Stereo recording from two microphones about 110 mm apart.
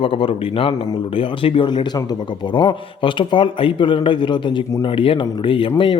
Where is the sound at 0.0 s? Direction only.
55° left (ahead or behind).